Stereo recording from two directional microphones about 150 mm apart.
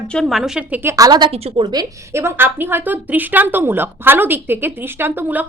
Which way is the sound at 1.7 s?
20° right (ahead or behind).